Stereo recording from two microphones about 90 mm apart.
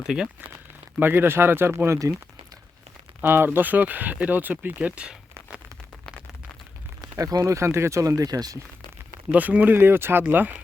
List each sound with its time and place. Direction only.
0.9 s speech: 25° right (ahead or behind)
3.2 s speech: 25° right (ahead or behind)
7.0 s speech: 45° right (ahead or behind)
9.3 s speech: 15° right (ahead or behind)